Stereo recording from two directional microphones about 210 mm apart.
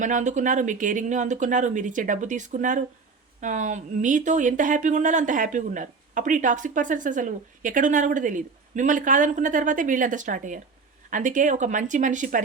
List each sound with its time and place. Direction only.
0.0 s speech: 35° right (ahead or behind)